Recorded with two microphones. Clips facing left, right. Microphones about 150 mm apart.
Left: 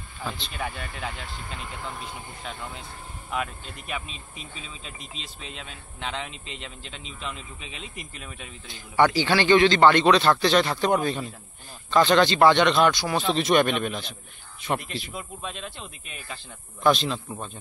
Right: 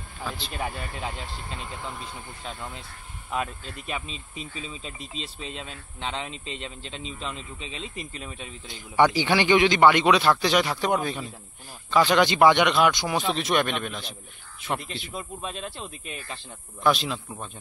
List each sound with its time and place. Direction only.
0.6 s speech: 30° right (ahead or behind)
5.1 s speech: 35° right (ahead or behind)
8.6 s a man's voice: 15° right (ahead or behind)
13.3 s a man's voice: centre (ahead or behind)
15.1 s speech: 35° right (ahead or behind)
16.8 s a man's voice: 5° right (ahead or behind)